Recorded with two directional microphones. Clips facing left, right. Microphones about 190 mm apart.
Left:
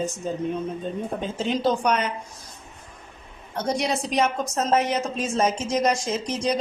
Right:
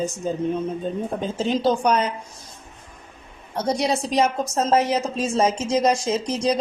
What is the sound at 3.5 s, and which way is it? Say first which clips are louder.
Speech: right 3 dB; 30° right (ahead or behind).